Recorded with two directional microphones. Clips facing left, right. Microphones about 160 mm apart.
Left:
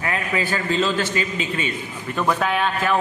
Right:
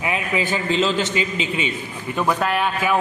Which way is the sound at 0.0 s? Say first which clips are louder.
Right 1 dB; 15° right (ahead or behind).